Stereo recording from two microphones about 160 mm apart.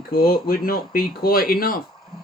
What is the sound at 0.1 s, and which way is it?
Speech, 65° left (ahead or behind).